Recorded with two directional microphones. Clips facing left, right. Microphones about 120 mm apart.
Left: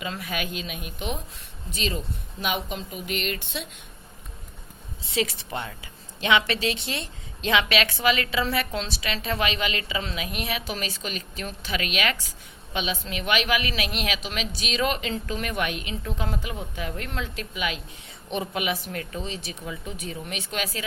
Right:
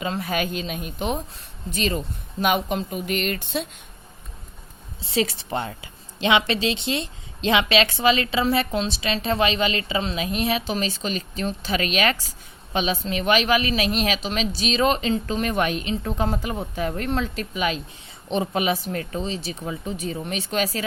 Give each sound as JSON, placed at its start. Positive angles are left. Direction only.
{"t": 0.0, "sound": "speech", "side_deg": -35}
{"t": 1.7, "sound": "speech", "side_deg": -50}
{"t": 5.1, "sound": "a woman's voice", "side_deg": -30}